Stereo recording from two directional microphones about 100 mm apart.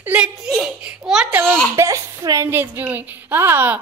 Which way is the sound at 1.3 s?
20° right (ahead or behind).